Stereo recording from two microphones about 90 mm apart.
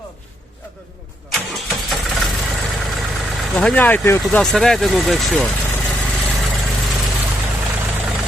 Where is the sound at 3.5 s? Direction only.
5° left (ahead or behind).